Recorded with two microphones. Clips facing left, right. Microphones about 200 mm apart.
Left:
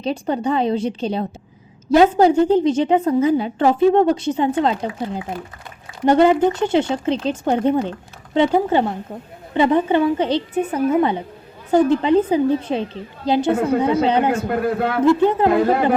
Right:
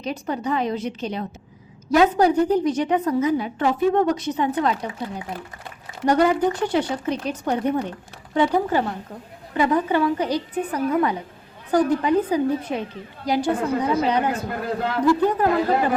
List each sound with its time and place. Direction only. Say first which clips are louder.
0.0 s a woman's voice: left 5 dB; 30° left (ahead or behind)
14.4 s a man's voice: left 6 dB; 60° left (ahead or behind)
15.0 s a woman's voice: left 4 dB; 25° left (ahead or behind)